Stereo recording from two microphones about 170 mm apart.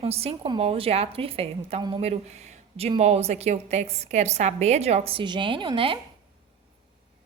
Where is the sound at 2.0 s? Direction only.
40° right (ahead or behind).